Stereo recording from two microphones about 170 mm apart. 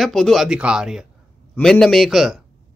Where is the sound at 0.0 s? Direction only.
Centre (ahead or behind).